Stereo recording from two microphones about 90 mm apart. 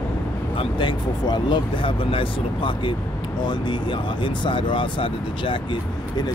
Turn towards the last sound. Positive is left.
turn(degrees=70)  # may be behind; listen again after turning